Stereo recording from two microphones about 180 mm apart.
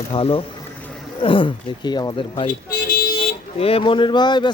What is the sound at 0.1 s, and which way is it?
A man's voice, 30° left (ahead or behind).